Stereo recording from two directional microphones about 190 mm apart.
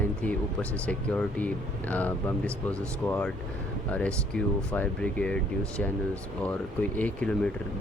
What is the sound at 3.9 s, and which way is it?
Speech, 5° left (ahead or behind).